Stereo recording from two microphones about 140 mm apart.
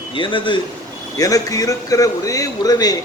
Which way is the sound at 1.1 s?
25° left (ahead or behind).